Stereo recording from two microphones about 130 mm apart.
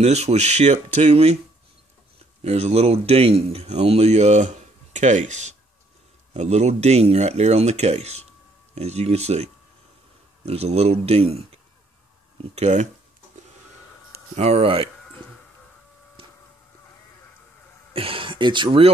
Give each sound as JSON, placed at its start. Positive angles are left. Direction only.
{"t": 0.0, "sound": "speech", "side_deg": -55}
{"t": 2.4, "sound": "speech", "side_deg": -50}
{"t": 12.5, "sound": "speech", "side_deg": -60}
{"t": 14.3, "sound": "speech", "side_deg": -55}
{"t": 17.9, "sound": "speech", "side_deg": -45}